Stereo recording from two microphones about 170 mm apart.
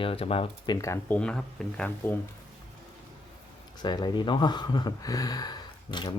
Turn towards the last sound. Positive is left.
turn(degrees=25)  # may be behind; listen again after turning